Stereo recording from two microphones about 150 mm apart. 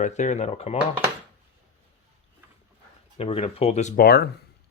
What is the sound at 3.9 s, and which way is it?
Speech, 90° left.